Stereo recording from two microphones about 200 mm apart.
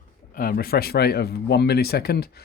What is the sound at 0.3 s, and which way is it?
Speech, 50° left (ahead or behind).